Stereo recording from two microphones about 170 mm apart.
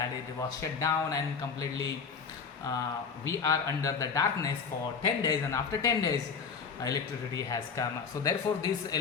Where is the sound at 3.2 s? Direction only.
20° left (ahead or behind).